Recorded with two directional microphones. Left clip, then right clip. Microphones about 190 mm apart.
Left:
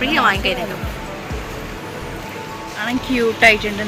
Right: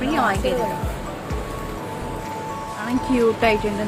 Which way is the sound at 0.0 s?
25° right (ahead or behind).